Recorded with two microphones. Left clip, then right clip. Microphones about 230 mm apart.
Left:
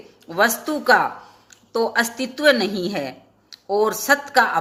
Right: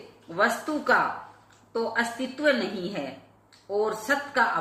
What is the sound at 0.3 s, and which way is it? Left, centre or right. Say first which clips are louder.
A woman's voice: left 6 dB; left.